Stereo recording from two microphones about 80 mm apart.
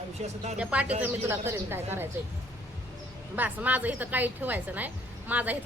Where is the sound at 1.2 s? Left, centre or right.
Right.